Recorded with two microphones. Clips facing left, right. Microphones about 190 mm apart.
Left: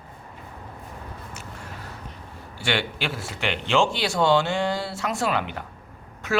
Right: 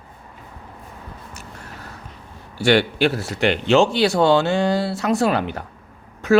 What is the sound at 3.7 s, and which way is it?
A man's voice, 40° right (ahead or behind).